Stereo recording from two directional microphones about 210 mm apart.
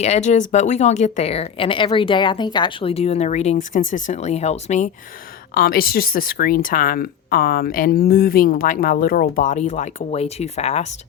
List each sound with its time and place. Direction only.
0.0 s speech: 35° left (ahead or behind)
5.5 s speech: 45° left (ahead or behind)